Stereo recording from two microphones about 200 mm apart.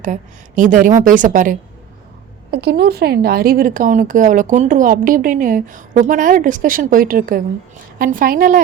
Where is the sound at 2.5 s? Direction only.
55° right (ahead or behind).